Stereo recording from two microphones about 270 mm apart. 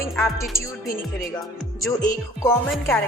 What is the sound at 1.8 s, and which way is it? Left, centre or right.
A woman's voice, centre.